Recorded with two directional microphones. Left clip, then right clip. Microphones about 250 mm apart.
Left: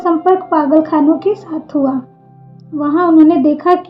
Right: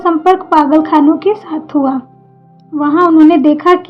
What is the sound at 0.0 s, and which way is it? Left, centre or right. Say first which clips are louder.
A woman's voice: right 2 dB; right.